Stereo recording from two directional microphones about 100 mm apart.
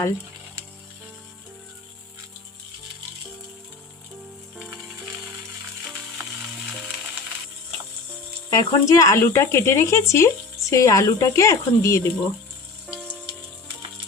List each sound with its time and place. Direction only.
4.5 s music: 5° right (ahead or behind)
8.4 s speech: 35° left (ahead or behind)